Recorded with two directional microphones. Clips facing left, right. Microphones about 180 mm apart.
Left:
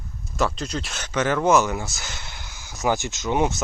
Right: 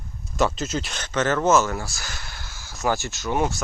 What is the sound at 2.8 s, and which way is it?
Speech, 20° left (ahead or behind).